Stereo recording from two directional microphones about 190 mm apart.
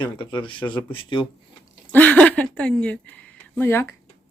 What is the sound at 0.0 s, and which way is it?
Speech, 25° left (ahead or behind).